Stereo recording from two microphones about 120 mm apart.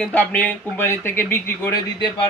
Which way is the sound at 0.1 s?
15° left (ahead or behind).